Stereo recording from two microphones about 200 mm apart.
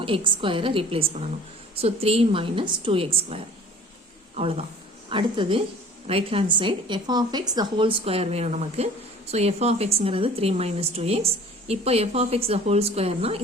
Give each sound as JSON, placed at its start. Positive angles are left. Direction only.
{"t": 0.0, "sound": "a woman's voice", "side_deg": -25}